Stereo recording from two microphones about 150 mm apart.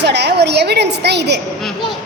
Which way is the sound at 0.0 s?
90° right.